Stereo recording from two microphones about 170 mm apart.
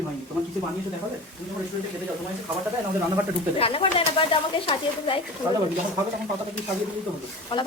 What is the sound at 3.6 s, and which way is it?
Speech, 35° left (ahead or behind).